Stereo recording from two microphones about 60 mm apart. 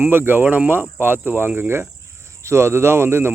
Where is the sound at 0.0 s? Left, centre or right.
Right.